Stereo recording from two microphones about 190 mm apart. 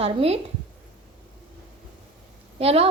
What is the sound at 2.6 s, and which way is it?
Speech, 30° right (ahead or behind).